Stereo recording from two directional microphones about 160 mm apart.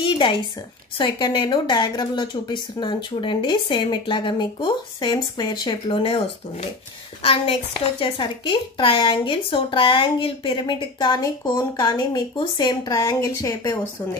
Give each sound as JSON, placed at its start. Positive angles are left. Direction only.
{"t": 0.0, "sound": "a sound", "side_deg": 30}
{"t": 0.9, "sound": "speech", "side_deg": 30}
{"t": 8.0, "sound": "speech", "side_deg": 30}